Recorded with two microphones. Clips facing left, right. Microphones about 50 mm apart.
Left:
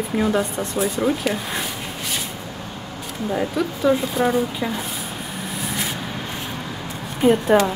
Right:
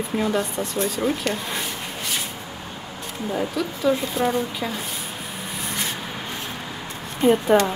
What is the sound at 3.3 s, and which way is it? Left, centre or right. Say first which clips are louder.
Speech: left 3 dB; centre.